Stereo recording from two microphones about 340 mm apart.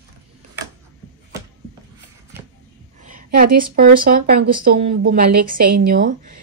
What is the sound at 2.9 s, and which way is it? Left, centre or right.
A woman's voice, right.